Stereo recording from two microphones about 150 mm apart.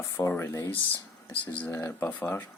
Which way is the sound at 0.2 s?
20° left (ahead or behind).